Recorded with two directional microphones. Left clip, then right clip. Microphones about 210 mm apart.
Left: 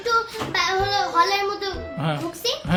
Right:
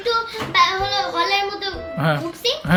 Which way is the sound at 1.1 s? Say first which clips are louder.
Even; 25° left (ahead or behind).